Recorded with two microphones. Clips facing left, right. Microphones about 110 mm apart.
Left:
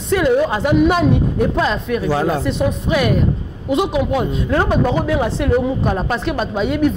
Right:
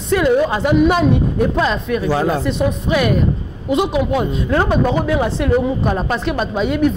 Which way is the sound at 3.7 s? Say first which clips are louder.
Even; 45° right (ahead or behind).